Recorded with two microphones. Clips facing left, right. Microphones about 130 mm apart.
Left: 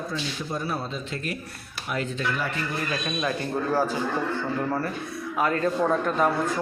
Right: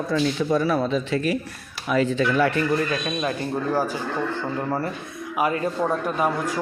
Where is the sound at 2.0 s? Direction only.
75° right (ahead or behind).